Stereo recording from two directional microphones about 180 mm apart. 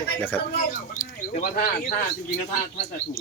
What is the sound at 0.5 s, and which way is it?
Speech, 50° left (ahead or behind).